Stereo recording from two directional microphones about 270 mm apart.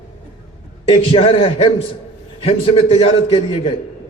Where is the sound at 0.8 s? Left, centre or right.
Centre.